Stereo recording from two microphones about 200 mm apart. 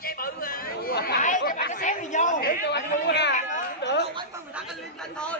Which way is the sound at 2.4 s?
55° left (ahead or behind).